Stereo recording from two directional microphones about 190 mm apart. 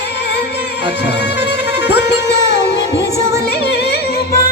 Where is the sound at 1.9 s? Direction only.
60° left (ahead or behind).